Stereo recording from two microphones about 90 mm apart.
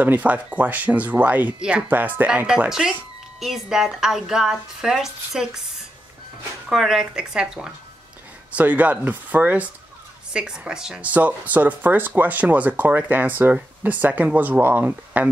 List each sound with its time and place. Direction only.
0.0 s speech: 15° right (ahead or behind)